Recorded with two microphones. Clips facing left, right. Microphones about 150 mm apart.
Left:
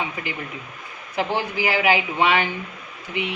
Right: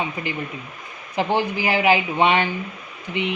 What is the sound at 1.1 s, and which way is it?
A woman's voice, 15° right (ahead or behind).